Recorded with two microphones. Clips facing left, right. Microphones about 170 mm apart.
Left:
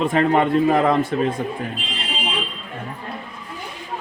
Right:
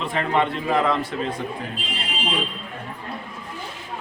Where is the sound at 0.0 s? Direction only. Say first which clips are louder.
Left 5 dB; 45° left (ahead or behind).